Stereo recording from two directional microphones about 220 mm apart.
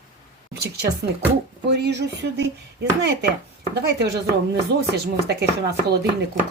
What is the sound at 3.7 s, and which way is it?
Speech, 50° right (ahead or behind).